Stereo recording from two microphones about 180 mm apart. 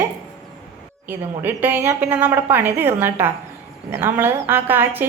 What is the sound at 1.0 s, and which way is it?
A woman's voice, 10° right (ahead or behind).